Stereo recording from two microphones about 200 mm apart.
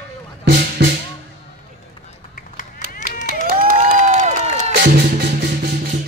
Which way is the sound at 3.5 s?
45° right (ahead or behind).